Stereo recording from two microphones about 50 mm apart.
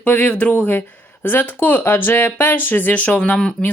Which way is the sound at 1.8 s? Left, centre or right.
Left.